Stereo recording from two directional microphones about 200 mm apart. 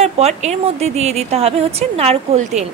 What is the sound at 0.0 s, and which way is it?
A woman's voice, 35° right (ahead or behind).